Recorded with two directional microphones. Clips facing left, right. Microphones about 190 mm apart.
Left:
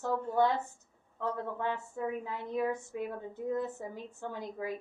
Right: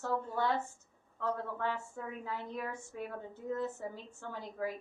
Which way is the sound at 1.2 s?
15° left (ahead or behind).